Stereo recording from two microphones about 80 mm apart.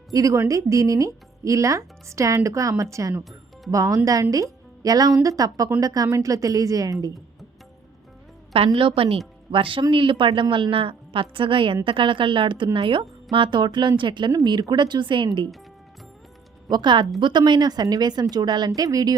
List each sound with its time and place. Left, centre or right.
0.1 s speech: right
9.5 s a woman's voice: right
14.3 s speech: right
16.6 s a woman's voice: right
18.8 s speech: right